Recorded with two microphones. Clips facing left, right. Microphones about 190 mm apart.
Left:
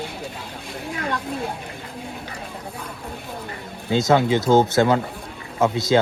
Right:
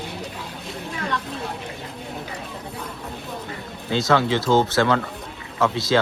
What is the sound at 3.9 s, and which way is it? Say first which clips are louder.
Speech: left 2 dB; 20° left (ahead or behind).